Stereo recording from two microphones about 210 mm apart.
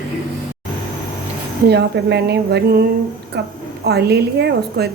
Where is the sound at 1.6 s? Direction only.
50° right (ahead or behind).